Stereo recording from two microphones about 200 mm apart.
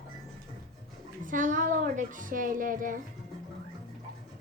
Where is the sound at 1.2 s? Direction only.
40° right (ahead or behind).